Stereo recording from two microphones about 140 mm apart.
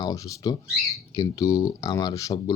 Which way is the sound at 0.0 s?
25° left (ahead or behind).